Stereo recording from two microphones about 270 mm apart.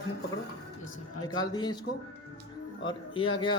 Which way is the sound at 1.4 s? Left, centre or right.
Centre.